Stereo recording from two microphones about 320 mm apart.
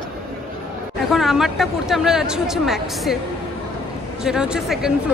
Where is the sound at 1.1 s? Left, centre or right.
Centre.